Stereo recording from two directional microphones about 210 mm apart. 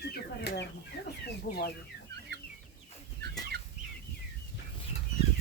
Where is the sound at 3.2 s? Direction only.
50° right (ahead or behind).